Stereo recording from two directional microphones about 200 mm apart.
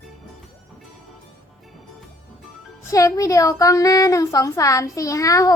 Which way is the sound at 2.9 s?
15° left (ahead or behind).